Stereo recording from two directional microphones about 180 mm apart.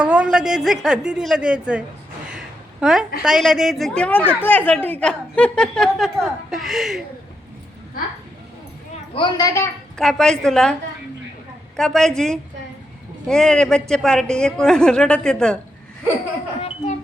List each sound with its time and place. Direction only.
0.0 s speech: 5° right (ahead or behind)
2.8 s speech: centre (ahead or behind)
9.1 s a child's voice: 25° left (ahead or behind)
10.0 s speech: centre (ahead or behind)
11.8 s speech: 5° left (ahead or behind)
16.6 s speech: 35° left (ahead or behind)